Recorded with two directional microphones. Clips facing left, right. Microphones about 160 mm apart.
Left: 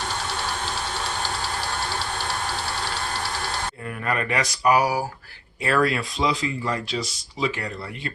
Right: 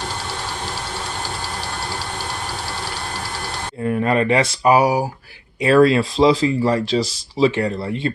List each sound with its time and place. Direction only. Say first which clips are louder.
3.8 s speech: right 11 dB; 25° right (ahead or behind)